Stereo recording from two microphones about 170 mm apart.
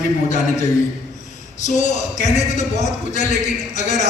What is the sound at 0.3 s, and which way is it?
A man's voice, 45° left (ahead or behind).